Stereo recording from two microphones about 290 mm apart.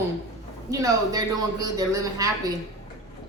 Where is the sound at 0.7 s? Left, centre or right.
Centre.